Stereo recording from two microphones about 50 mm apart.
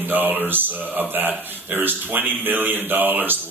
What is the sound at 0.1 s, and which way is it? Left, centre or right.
Speech, right.